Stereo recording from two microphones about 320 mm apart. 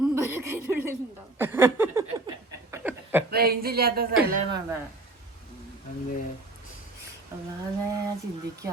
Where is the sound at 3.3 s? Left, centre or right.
Right.